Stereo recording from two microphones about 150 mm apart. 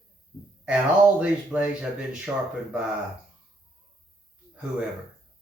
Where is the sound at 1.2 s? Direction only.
5° right (ahead or behind).